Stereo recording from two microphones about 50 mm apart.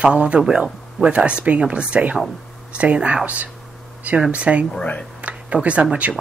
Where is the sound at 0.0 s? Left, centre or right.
Right.